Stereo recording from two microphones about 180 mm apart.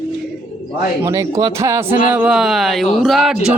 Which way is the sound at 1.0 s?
15° right (ahead or behind).